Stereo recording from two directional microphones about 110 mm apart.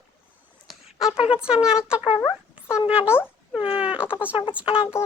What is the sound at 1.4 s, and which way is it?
Speech, 5° right (ahead or behind).